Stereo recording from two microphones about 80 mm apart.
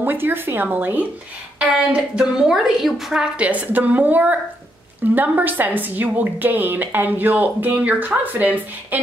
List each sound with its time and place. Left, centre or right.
0.0 s a woman's voice: right
1.9 s a woman's voice: centre